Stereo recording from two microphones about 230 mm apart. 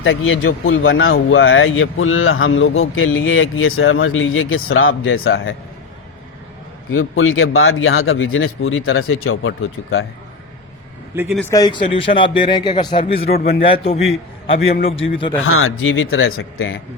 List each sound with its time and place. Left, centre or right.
0.0 s speech: left
6.9 s speech: left
11.1 s speech: centre
11.5 s speech: centre
13.3 s a man's voice: left
13.6 s speech: left
15.4 s speech: left